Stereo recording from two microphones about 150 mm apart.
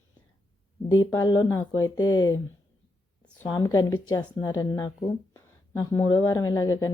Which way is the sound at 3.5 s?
25° left (ahead or behind).